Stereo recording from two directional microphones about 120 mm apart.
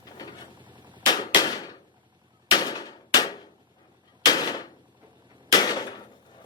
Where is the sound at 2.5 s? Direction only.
35° left (ahead or behind).